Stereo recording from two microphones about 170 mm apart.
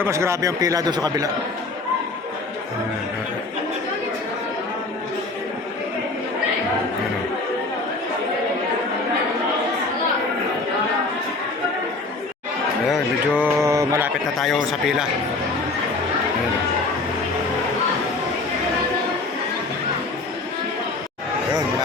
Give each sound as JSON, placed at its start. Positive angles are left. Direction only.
{"t": 0.0, "sound": "speech", "side_deg": -15}
{"t": 12.9, "sound": "a sound", "side_deg": -10}
{"t": 14.3, "sound": "speech", "side_deg": 0}